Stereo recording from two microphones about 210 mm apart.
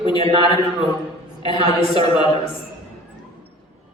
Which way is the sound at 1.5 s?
25° left (ahead or behind).